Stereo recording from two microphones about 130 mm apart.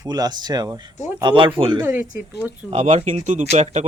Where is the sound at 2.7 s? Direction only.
65° right (ahead or behind).